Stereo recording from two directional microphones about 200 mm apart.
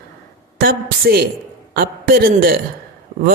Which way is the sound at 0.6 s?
50° right (ahead or behind).